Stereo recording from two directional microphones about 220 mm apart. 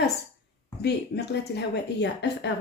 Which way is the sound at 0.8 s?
50° left (ahead or behind).